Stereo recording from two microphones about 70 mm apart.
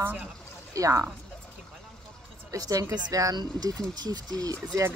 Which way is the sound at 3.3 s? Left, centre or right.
Right.